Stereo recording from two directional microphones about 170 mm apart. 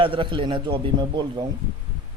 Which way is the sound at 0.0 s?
30° right (ahead or behind).